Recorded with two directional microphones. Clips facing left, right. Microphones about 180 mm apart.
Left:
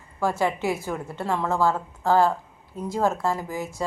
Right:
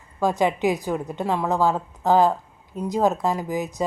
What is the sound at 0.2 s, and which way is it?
Speech, 15° right (ahead or behind).